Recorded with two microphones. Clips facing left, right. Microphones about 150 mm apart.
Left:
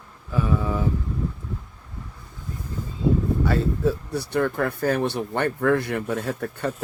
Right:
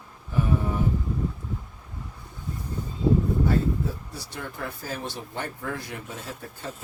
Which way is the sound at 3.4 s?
75° left (ahead or behind).